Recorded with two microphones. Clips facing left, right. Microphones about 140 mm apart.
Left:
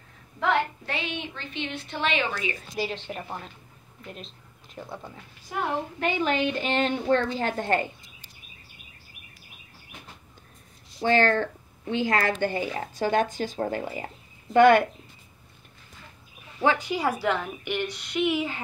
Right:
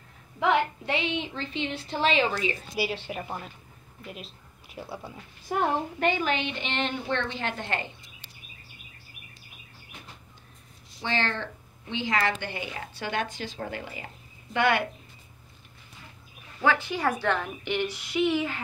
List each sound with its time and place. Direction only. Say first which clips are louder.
0.4 s a child's voice: right 1 dB; 10° right (ahead or behind)
0.9 s a woman's voice: right 4 dB; 25° right (ahead or behind)
2.7 s a woman's voice: right 1 dB; 10° right (ahead or behind)
5.5 s a child's voice: right 4 dB; 50° right (ahead or behind)
6.2 s speech: left 4 dB; 40° left (ahead or behind)
11.0 s speech: left 8 dB; 45° left (ahead or behind)
16.6 s a woman's voice: left 1 dB; 15° left (ahead or behind); by 18.3 s 5° right (ahead or behind)
18.3 s speech: even; 15° left (ahead or behind)